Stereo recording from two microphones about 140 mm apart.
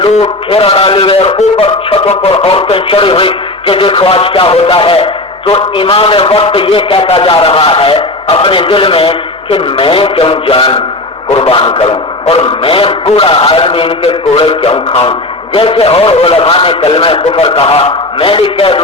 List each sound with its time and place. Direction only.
0.0 s a man's voice: 40° left (ahead or behind)